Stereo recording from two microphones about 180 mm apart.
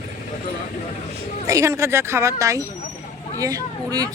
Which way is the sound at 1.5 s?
15° right (ahead or behind).